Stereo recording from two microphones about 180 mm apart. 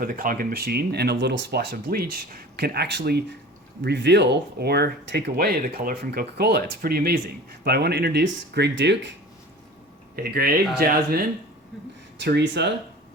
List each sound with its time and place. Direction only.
0.0 s speech: 55° right (ahead or behind); by 9.0 s 80° right
10.2 s speech: 60° right (ahead or behind)
12.2 s speech: 75° right (ahead or behind)